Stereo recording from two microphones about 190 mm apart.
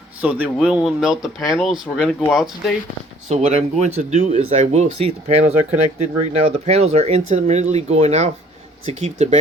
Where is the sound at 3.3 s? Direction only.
35° right (ahead or behind).